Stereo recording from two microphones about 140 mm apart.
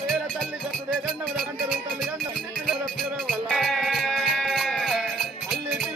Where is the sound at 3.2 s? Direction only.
Centre (ahead or behind).